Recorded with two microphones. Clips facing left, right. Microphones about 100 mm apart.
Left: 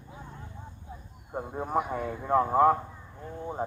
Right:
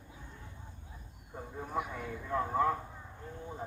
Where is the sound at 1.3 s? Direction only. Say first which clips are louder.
Left 9 dB; 70° left (ahead or behind).